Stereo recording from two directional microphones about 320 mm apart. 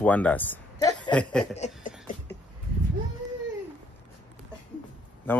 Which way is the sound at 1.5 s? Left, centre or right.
Left.